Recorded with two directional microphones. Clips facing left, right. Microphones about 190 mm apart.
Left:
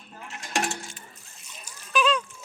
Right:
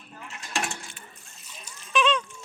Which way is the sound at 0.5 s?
45° left (ahead or behind).